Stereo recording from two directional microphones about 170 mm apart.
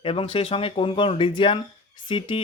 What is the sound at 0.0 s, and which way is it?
Speech, 30° left (ahead or behind).